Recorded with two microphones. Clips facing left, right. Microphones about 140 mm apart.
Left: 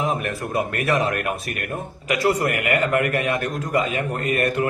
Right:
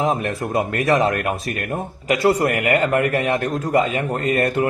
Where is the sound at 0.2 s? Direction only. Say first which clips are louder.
Right 3 dB; 25° right (ahead or behind).